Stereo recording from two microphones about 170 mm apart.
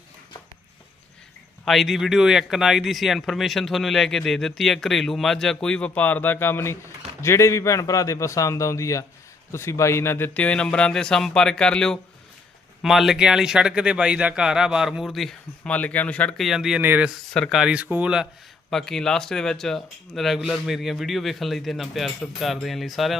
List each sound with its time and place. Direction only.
1.6 s a man's voice: centre (ahead or behind)